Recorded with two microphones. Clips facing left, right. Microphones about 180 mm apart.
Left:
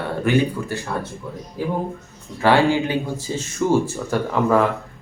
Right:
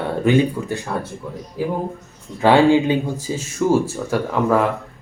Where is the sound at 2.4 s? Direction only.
20° right (ahead or behind).